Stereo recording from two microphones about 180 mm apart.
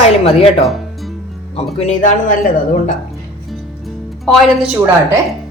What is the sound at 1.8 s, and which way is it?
Speech, 40° left (ahead or behind).